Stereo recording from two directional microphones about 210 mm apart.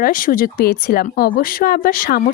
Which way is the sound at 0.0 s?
40° left (ahead or behind).